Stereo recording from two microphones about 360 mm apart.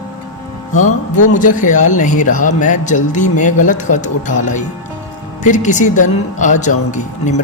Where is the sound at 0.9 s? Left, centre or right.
Left.